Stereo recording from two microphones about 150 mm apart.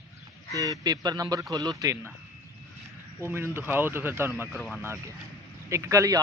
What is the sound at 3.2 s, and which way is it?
Speech, 15° right (ahead or behind).